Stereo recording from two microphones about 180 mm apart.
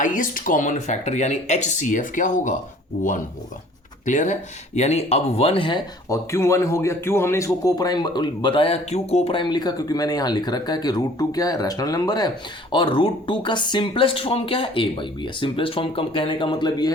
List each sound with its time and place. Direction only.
0.0 s speech: 45° left (ahead or behind)
4.0 s speech: 45° left (ahead or behind); by 16.9 s 25° left (ahead or behind)